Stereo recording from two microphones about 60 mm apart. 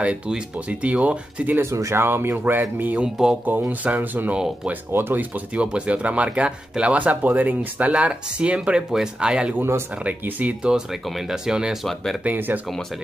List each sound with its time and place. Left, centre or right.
0.0 s speech: centre
1.6 s speech: right
2.0 s speech: right
5.3 s speech: right
9.6 s speech: right
10.0 s speech: right
10.7 s speech: centre
11.8 s speech: centre
12.2 s speech: right